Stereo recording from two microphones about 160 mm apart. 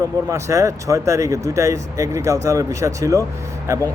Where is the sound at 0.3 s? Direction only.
20° right (ahead or behind).